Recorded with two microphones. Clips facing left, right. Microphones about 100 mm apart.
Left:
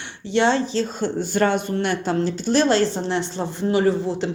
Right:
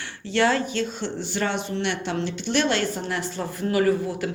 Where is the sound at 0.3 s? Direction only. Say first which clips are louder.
Left 3 dB; 20° left (ahead or behind).